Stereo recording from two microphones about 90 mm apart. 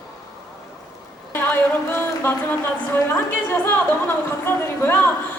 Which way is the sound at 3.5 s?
25° left (ahead or behind).